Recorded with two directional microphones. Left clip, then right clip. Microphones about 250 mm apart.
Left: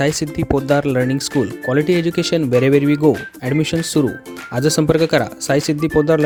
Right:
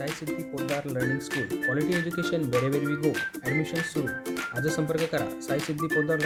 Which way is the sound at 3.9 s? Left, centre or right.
Left.